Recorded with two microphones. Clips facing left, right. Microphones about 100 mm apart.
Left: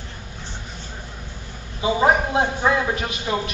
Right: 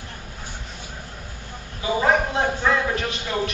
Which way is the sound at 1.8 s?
20° left (ahead or behind).